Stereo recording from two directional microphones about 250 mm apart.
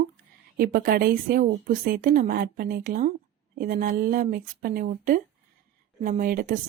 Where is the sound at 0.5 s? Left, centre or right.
Right.